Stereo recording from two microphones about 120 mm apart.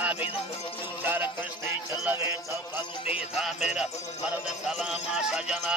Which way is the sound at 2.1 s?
20° right (ahead or behind).